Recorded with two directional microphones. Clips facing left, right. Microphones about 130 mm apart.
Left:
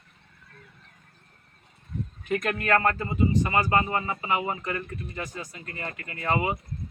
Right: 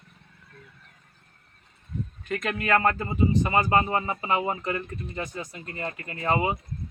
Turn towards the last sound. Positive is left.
turn(degrees=-25)  # may be behind; listen again after turning